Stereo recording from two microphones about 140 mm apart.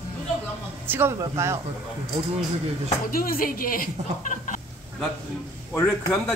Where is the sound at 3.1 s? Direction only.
90° left.